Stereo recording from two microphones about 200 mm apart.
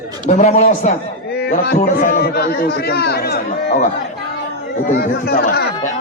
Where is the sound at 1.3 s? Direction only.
55° left (ahead or behind).